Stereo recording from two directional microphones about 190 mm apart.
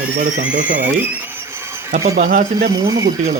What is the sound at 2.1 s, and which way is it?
Speech, 50° right (ahead or behind).